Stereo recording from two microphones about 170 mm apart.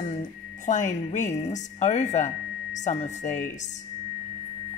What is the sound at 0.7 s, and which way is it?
A woman's voice, 45° left (ahead or behind).